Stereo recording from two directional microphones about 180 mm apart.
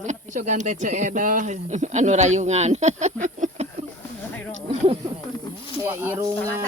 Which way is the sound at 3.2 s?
40° right (ahead or behind).